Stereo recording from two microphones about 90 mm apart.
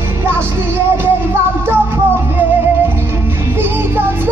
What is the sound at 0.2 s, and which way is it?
Music, 25° right (ahead or behind).